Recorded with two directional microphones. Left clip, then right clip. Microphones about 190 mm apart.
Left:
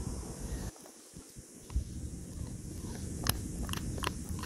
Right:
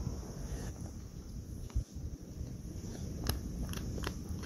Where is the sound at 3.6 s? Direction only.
20° left (ahead or behind).